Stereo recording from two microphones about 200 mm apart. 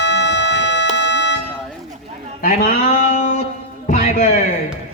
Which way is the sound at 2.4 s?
45° left (ahead or behind).